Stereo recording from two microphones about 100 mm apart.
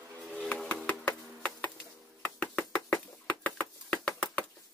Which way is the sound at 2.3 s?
10° left (ahead or behind).